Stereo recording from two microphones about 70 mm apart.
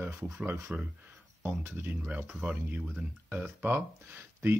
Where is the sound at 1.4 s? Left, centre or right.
Right.